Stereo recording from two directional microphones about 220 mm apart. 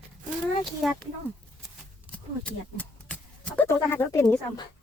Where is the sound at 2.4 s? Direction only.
5° left (ahead or behind).